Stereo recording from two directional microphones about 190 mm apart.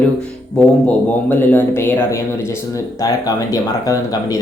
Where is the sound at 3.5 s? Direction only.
20° left (ahead or behind).